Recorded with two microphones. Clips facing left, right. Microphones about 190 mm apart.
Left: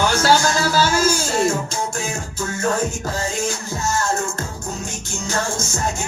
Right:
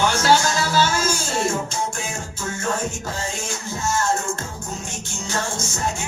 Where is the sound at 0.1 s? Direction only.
40° left (ahead or behind).